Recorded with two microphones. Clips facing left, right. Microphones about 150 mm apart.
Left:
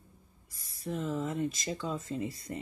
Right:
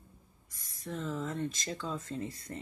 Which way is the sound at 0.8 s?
10° left (ahead or behind).